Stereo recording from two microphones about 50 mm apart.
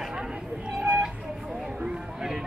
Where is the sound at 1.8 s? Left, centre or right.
Centre.